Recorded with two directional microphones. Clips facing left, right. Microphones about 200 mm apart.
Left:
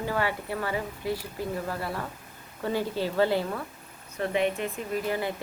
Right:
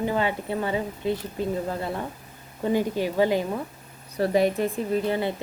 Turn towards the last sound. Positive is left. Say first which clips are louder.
# right 5 dB
turn(degrees=-25)  # may be behind; listen again after turning